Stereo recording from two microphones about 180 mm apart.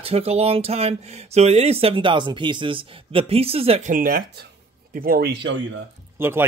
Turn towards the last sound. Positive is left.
turn(degrees=-15)  # may be behind; listen again after turning